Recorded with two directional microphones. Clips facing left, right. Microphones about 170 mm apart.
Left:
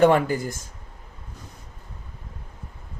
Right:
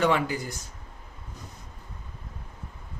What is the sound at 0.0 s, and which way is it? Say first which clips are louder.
Speech: left 7 dB; 50° left (ahead or behind).